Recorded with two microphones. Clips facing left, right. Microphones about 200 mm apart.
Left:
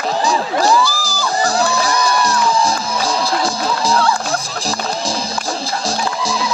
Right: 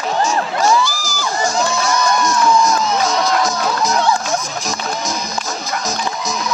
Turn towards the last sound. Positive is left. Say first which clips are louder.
# left 3 dB
turn(degrees=30)  # may be behind; listen again after turning